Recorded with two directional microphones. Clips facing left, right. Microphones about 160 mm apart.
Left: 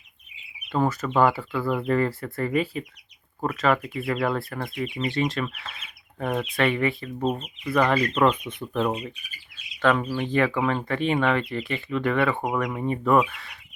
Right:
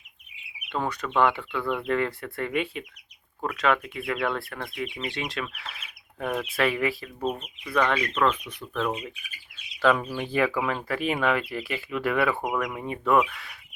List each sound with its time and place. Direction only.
0.7 s speech: 5° left (ahead or behind)
8.2 s speech: 20° left (ahead or behind)
10.3 s speech: 5° right (ahead or behind)